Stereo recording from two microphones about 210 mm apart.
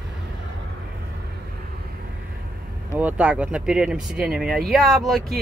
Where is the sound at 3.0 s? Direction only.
5° right (ahead or behind).